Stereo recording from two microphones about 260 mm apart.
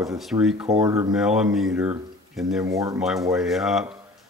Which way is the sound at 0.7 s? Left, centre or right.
Centre.